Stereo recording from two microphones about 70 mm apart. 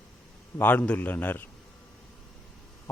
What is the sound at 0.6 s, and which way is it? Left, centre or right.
Speech, left.